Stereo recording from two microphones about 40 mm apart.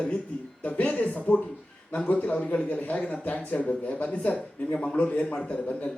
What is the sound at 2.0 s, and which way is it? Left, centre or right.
Speech, left.